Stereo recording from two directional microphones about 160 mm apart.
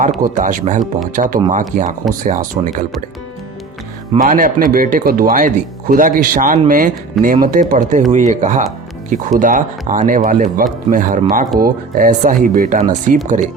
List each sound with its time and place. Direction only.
0.2 s speech: 55° right (ahead or behind)
4.2 s speech: 55° right (ahead or behind)